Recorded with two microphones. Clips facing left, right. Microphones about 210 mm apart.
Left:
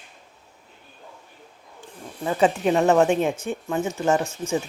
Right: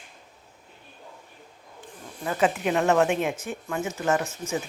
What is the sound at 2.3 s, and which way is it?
Speech, 30° left (ahead or behind).